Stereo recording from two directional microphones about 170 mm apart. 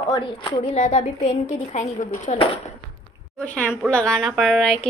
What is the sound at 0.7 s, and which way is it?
Speech, 45° left (ahead or behind).